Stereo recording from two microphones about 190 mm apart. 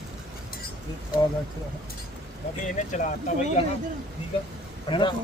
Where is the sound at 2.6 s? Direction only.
40° left (ahead or behind).